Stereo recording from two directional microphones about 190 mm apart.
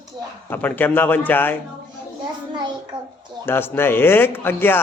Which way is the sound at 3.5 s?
10° left (ahead or behind).